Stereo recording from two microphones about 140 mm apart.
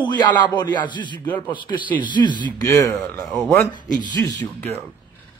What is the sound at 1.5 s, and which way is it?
Speech, 35° left (ahead or behind).